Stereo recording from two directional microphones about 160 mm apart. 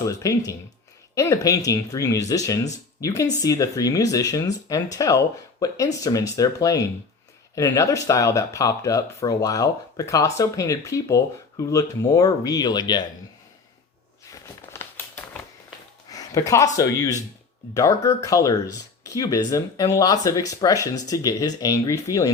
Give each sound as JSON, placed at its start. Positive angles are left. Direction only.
{"t": 0.0, "sound": "speech", "side_deg": 20}
{"t": 14.3, "sound": "a sound", "side_deg": 15}
{"t": 16.7, "sound": "speech", "side_deg": 20}